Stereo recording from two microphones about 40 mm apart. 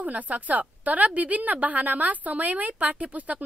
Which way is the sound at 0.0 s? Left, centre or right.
Right.